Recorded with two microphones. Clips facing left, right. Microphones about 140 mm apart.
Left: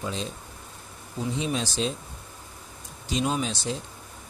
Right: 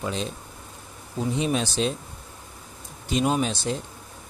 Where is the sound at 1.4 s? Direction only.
60° right (ahead or behind).